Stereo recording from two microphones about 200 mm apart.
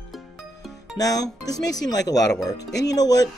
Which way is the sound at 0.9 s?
20° left (ahead or behind).